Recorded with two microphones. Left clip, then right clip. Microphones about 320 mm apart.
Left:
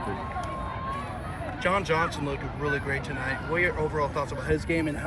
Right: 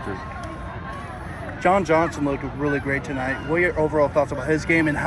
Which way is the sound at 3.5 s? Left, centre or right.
Centre.